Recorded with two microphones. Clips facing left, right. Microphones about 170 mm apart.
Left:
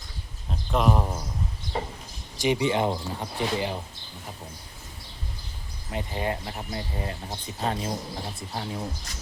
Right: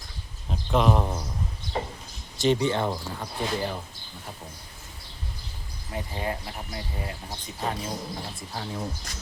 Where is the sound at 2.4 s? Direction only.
15° left (ahead or behind).